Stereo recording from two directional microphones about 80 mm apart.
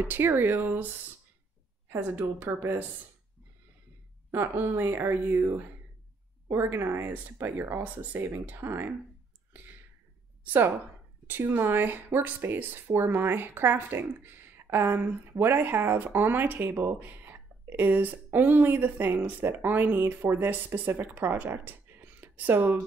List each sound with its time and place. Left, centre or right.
0.0 s speech: right
1.9 s speech: right
4.3 s speech: right
7.5 s speech: right
7.8 s speech: right
10.4 s a woman's voice: right